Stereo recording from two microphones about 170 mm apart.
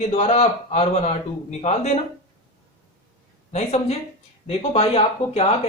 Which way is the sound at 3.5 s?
40° left (ahead or behind).